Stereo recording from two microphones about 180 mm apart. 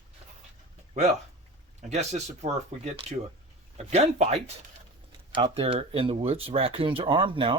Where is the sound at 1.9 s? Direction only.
40° right (ahead or behind).